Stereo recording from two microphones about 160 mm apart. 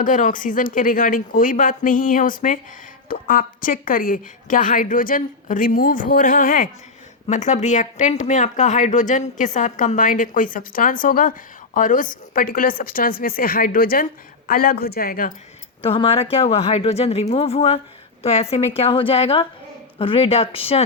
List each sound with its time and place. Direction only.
0.0 s a woman's voice: 55° left (ahead or behind)
7.3 s a woman's voice: 50° left (ahead or behind); by 15.3 s 65° left (ahead or behind)
15.8 s speech: 35° left (ahead or behind)